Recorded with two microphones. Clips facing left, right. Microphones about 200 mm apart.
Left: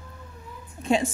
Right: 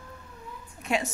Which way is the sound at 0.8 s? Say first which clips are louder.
Left 5 dB; 30° left (ahead or behind).